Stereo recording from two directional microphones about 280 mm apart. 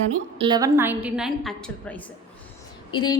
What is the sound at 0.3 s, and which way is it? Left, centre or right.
A woman's voice, centre.